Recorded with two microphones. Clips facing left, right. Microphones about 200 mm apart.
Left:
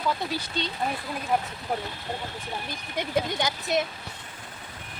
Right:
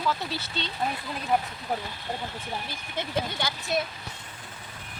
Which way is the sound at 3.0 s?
20° left (ahead or behind).